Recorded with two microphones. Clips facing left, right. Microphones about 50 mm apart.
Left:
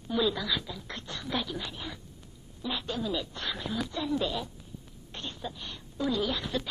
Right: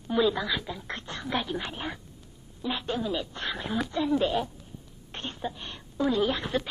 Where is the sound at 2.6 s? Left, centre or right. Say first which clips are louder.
Right 3 dB; right.